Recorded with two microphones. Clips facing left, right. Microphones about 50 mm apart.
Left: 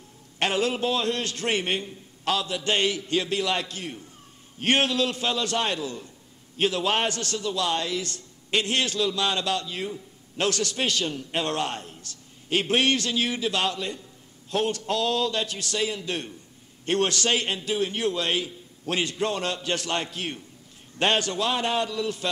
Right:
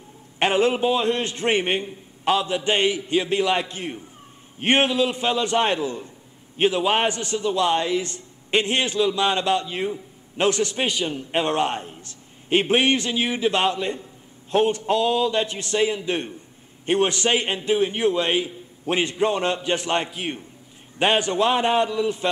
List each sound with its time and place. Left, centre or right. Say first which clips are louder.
0.4 s a man's voice: right 5 dB; right